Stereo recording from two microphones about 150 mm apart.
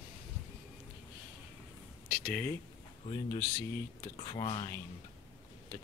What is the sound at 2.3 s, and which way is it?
Speech, 10° left (ahead or behind).